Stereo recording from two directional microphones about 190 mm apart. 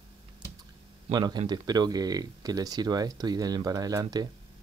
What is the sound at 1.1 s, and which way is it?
Speech, 20° right (ahead or behind).